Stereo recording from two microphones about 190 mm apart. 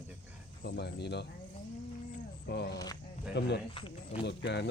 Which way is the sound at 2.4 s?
60° left (ahead or behind).